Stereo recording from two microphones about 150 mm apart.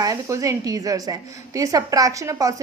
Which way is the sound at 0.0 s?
20° right (ahead or behind).